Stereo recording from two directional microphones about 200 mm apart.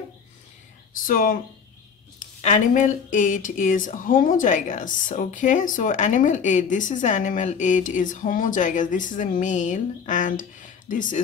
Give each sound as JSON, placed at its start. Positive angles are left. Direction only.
{"t": 1.0, "sound": "speech", "side_deg": 45}